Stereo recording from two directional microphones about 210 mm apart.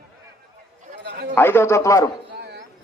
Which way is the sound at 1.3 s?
10° left (ahead or behind).